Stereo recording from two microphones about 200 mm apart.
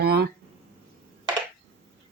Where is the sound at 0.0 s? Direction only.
50° right (ahead or behind).